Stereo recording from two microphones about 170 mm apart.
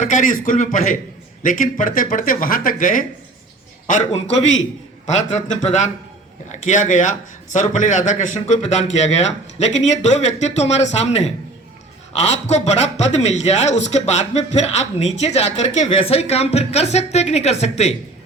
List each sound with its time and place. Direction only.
0.0 s a man's voice: 45° left (ahead or behind)
5.6 s a man's voice: 45° left (ahead or behind)